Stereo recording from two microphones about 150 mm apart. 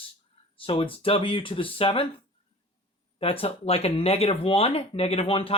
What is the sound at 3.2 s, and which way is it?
Speech, 40° left (ahead or behind).